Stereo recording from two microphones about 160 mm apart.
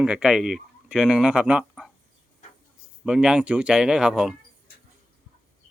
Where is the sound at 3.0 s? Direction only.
5° right (ahead or behind).